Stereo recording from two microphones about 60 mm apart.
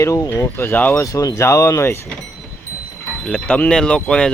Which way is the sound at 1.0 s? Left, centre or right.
Left.